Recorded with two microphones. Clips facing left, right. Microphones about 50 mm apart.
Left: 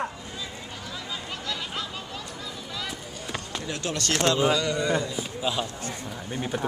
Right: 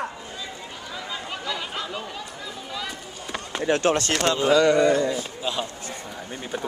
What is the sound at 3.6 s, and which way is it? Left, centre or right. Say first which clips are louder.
Speech: right 13 dB; right.